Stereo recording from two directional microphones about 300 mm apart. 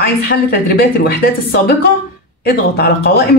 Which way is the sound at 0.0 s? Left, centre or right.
Left.